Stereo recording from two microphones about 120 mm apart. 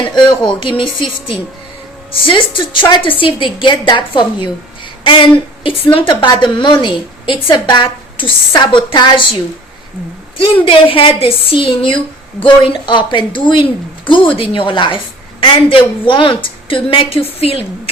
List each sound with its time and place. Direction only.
0.1 s speech: 35° left (ahead or behind)
2.2 s a woman's voice: 45° left (ahead or behind)
5.6 s a woman's voice: 50° left (ahead or behind)
10.3 s a woman's voice: 45° left (ahead or behind)